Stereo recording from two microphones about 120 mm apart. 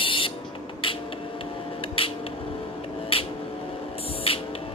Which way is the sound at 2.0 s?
50° left (ahead or behind).